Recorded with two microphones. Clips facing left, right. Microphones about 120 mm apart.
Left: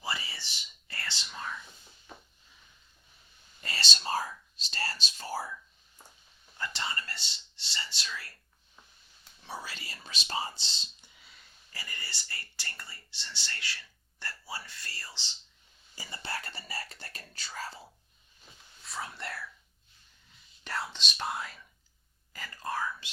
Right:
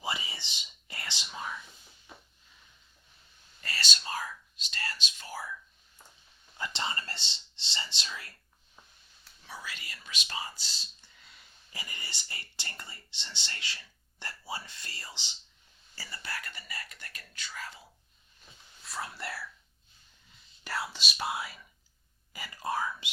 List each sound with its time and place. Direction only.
0.0 s whispering: 15° right (ahead or behind)
3.6 s whispering: 25° left (ahead or behind)
6.6 s whispering: 20° right (ahead or behind)
9.5 s whispering: 30° left (ahead or behind)
11.0 s clicking: 5° left (ahead or behind)
11.7 s speech: 15° right (ahead or behind)
16.0 s speech: 25° left (ahead or behind)
18.8 s speech: centre (ahead or behind)
20.7 s speech: 5° right (ahead or behind)